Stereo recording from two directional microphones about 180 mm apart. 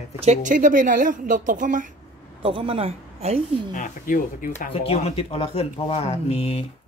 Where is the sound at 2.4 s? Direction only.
30° right (ahead or behind).